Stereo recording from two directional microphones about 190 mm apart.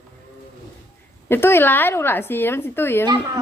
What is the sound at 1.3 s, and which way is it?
Speech, 10° left (ahead or behind).